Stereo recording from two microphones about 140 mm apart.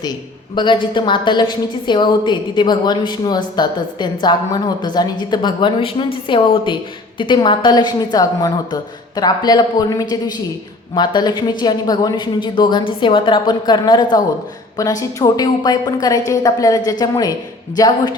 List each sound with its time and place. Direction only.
0.5 s a woman's voice: 35° left (ahead or behind)